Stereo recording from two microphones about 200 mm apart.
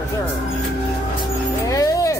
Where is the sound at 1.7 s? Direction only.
15° left (ahead or behind).